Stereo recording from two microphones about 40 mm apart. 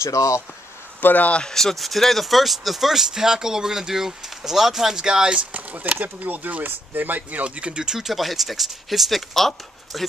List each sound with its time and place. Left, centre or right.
1.0 s speech: left
1.5 s speech: centre
4.9 s speech: centre
5.5 s speech: right
7.4 s speech: right
7.9 s speech: centre